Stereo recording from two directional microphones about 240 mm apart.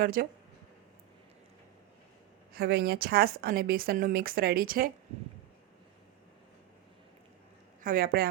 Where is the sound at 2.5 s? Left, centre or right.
Right.